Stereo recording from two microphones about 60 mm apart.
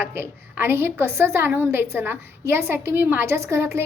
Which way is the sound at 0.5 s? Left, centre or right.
Right.